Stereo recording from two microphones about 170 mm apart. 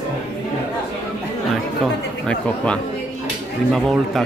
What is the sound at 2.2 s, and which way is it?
Speech, 5° left (ahead or behind).